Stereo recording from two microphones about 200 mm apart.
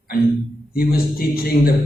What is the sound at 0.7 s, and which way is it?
A man's voice, 50° left (ahead or behind).